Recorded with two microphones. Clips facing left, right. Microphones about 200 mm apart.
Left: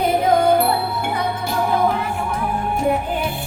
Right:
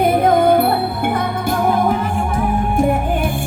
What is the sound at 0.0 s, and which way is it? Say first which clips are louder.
Music: right 3 dB; 55° right (ahead or behind).